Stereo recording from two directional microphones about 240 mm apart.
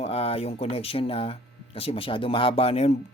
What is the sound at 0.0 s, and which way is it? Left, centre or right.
Speech, left.